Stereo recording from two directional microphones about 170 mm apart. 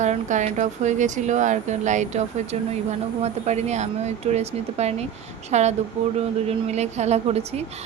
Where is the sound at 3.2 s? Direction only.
40° right (ahead or behind).